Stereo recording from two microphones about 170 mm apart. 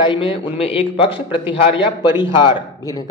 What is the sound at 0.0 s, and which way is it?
A man's voice, 30° left (ahead or behind).